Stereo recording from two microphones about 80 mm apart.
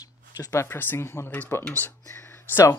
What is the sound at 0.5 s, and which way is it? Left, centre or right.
Speech, left.